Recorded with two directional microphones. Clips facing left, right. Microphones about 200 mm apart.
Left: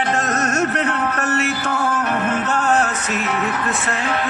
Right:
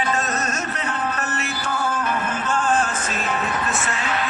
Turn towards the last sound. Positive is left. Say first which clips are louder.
# left 3 dB
turn(degrees=60)  # may be behind; listen again after turning